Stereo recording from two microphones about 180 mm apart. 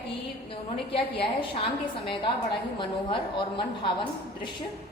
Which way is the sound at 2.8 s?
25° left (ahead or behind).